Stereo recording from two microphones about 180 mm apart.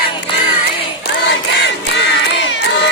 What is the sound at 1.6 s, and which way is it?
Crowd, 75° left (ahead or behind).